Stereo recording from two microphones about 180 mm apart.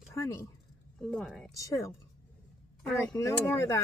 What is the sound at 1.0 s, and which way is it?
Speech, centre (ahead or behind).